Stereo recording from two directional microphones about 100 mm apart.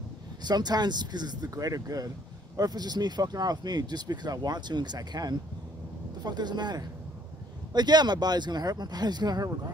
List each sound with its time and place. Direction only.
0.4 s speech: 45° right (ahead or behind)